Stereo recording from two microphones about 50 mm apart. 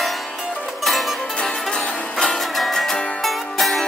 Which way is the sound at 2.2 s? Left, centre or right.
Centre.